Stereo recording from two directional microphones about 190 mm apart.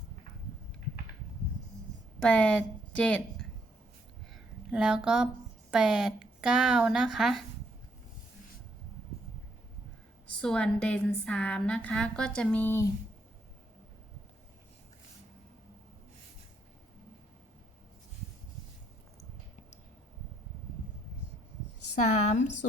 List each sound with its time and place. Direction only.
2.1 s a woman's voice: 5° left (ahead or behind)
4.3 s a sound: centre (ahead or behind)
5.7 s speech: 5° right (ahead or behind)
10.4 s speech: 5° left (ahead or behind)
21.9 s a woman's voice: 40° left (ahead or behind)